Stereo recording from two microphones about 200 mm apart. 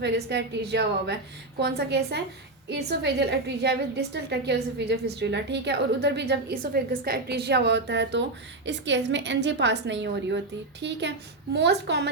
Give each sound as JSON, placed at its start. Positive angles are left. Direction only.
{"t": 0.0, "sound": "a woman's voice", "side_deg": -55}